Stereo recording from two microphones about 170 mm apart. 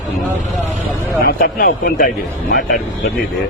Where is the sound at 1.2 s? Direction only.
55° left (ahead or behind).